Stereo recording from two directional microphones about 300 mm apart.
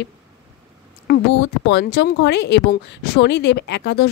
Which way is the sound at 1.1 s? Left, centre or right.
Left.